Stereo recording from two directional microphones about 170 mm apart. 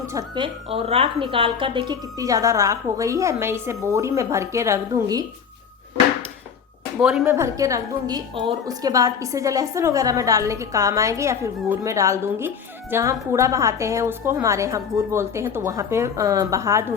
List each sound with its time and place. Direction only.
0.1 s a woman's voice: 25° right (ahead or behind)
7.0 s a woman's voice: 5° right (ahead or behind)
7.3 s a woman's voice: 20° right (ahead or behind)